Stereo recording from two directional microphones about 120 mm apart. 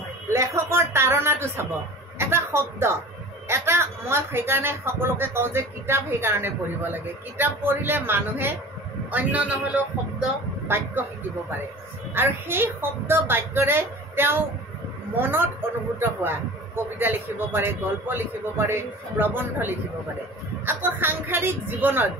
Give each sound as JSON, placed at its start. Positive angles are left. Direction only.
{"t": 0.3, "sound": "a man's voice", "side_deg": -25}
{"t": 10.7, "sound": "a man's voice", "side_deg": -15}
{"t": 12.1, "sound": "a man's voice", "side_deg": -20}